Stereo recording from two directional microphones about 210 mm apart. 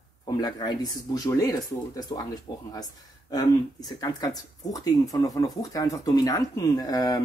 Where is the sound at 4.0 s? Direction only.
20° left (ahead or behind).